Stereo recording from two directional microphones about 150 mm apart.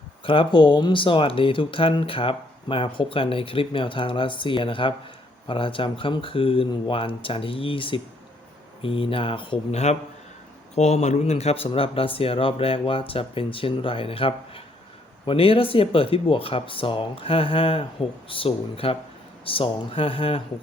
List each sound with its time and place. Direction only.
0.3 s speech: 35° left (ahead or behind)